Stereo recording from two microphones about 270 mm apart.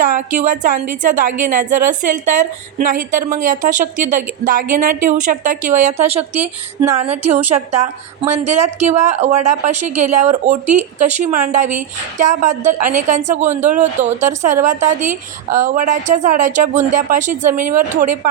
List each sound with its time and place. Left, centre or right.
0.3 s a woman's voice: right
6.1 s a woman's voice: centre
6.8 s a woman's voice: right
10.7 s speech: right
11.2 s a woman's voice: right